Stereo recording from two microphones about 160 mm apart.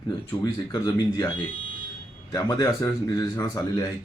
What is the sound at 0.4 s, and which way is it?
Speech, 25° left (ahead or behind).